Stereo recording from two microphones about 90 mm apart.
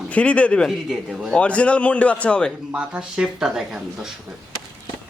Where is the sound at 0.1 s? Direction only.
15° left (ahead or behind).